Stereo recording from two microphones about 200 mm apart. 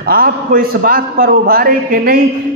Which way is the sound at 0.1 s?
45° right (ahead or behind).